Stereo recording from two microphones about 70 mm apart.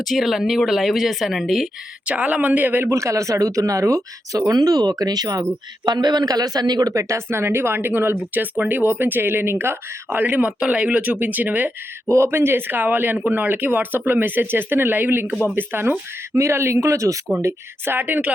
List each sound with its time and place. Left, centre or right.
0.0 s speech: centre
2.0 s speech: centre
2.9 s speech: right
5.8 s speech: right
6.9 s speech: right
12.0 s speech: right
15.3 s speech: centre
15.5 s speech: right
16.4 s speech: right
17.4 s speech: right